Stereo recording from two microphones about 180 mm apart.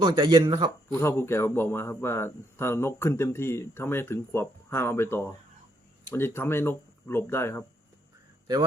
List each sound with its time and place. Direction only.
0.0 s speech: 25° right (ahead or behind)
0.9 s speech: 15° left (ahead or behind)